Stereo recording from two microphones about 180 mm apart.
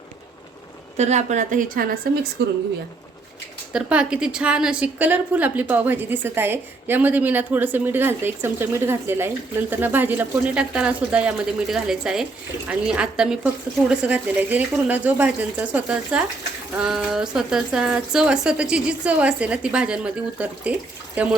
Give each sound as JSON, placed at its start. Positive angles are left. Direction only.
{"t": 0.9, "sound": "a woman's voice", "side_deg": -40}
{"t": 2.4, "sound": "speech", "side_deg": -75}
{"t": 3.7, "sound": "a woman's voice", "side_deg": -5}